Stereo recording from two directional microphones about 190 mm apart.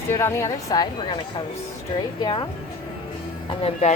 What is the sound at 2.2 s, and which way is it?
Speech, 25° left (ahead or behind).